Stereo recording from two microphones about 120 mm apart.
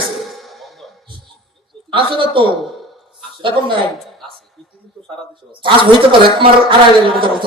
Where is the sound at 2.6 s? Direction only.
Centre (ahead or behind).